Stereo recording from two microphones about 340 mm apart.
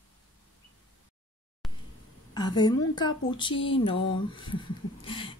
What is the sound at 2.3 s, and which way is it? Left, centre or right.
Speech, centre.